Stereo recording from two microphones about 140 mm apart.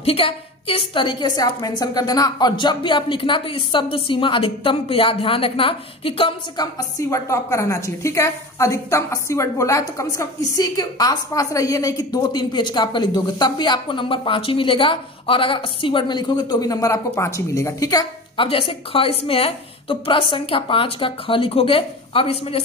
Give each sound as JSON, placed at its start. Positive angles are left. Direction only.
{"t": 0.0, "sound": "a woman's voice", "side_deg": 40}